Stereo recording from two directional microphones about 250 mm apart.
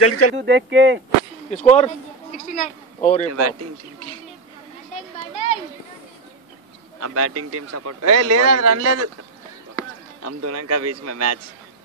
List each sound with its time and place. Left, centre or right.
0.0 s speech: left
0.4 s speech: right
1.5 s speech: left
3.3 s speech: right
7.0 s a man's voice: right
10.2 s speech: right